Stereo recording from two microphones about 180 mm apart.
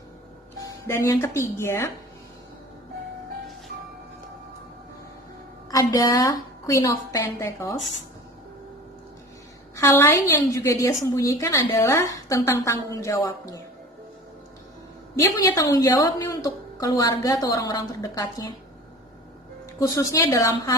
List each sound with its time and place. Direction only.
0.9 s a woman's voice: 15° left (ahead or behind)
5.7 s a woman's voice: 20° left (ahead or behind)
9.7 s a woman's voice: 15° left (ahead or behind)
15.1 s a woman's voice: 15° left (ahead or behind)
19.8 s a woman's voice: 20° left (ahead or behind)